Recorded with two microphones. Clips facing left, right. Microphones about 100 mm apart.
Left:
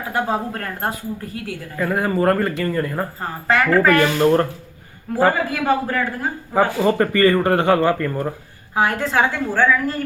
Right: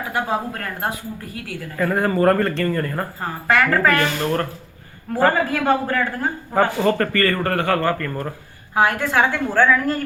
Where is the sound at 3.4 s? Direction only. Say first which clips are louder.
Left 2 dB; 20° left (ahead or behind).